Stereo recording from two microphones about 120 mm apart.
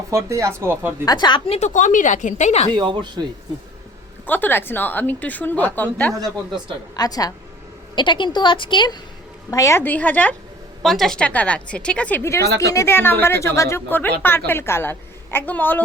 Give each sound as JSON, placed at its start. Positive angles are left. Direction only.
{"t": 0.1, "sound": "speech", "side_deg": -25}
{"t": 1.0, "sound": "a woman's voice", "side_deg": 35}
{"t": 1.5, "sound": "speech", "side_deg": 70}
{"t": 2.7, "sound": "speech", "side_deg": -40}
{"t": 4.3, "sound": "a woman's voice", "side_deg": 15}
{"t": 6.1, "sound": "speech", "side_deg": -30}
{"t": 6.9, "sound": "a woman's voice", "side_deg": 30}
{"t": 9.5, "sound": "speech", "side_deg": 25}
{"t": 9.8, "sound": "a woman's voice", "side_deg": 15}
{"t": 10.8, "sound": "a woman's voice", "side_deg": 0}
{"t": 12.2, "sound": "speech", "side_deg": 25}